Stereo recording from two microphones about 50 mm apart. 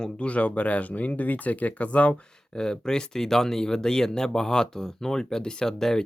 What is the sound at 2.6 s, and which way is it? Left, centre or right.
Speech, centre.